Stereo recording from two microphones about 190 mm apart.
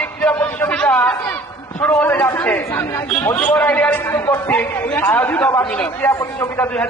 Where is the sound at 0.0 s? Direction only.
5° left (ahead or behind).